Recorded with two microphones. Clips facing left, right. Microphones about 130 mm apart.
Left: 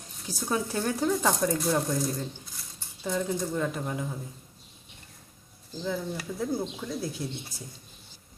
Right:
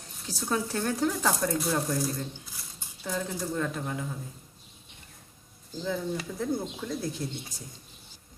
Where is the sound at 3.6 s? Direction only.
15° left (ahead or behind).